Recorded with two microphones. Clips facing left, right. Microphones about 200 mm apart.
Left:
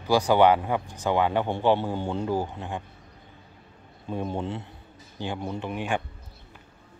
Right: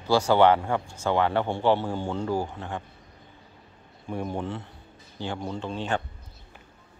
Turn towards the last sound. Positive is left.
turn(degrees=15)  # may be behind; listen again after turning